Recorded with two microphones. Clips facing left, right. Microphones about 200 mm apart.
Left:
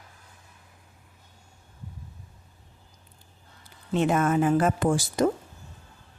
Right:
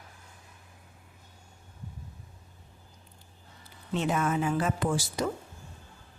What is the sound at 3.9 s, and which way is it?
Speech, 50° left (ahead or behind).